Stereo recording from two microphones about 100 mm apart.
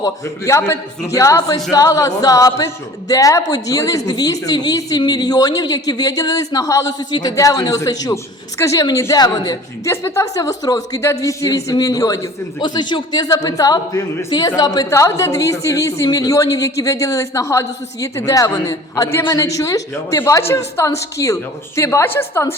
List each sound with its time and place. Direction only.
0.0 s a woman's voice: 25° left (ahead or behind)
9.9 s a woman's voice: 25° left (ahead or behind)
12.5 s a woman's voice: 50° left (ahead or behind); by 22.4 s 25° left (ahead or behind)